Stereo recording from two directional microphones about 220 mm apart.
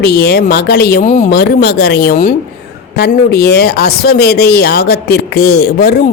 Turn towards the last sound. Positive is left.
turn(degrees=45)  # may be behind; listen again after turning